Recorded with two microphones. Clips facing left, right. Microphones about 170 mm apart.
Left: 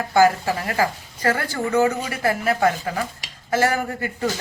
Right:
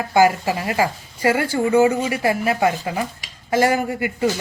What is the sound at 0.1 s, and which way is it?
A woman's voice, 15° right (ahead or behind).